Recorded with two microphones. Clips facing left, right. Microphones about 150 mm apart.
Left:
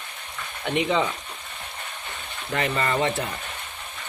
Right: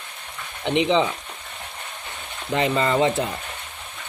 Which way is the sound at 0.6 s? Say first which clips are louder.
Right 4 dB; 20° right (ahead or behind).